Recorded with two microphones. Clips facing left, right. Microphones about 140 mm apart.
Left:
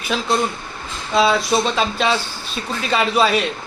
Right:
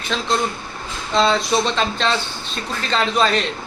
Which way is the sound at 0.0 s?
10° left (ahead or behind).